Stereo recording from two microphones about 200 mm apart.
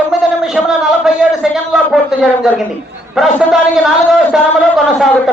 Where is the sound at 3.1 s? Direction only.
5° right (ahead or behind).